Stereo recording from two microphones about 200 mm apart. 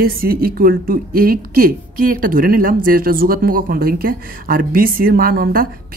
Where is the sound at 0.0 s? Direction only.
45° right (ahead or behind).